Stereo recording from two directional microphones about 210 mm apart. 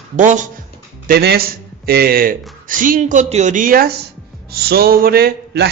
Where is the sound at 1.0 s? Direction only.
50° right (ahead or behind).